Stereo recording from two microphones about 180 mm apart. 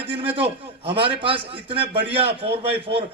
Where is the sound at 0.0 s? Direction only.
30° right (ahead or behind).